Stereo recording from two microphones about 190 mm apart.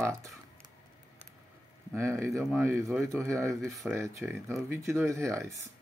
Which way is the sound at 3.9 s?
15° right (ahead or behind).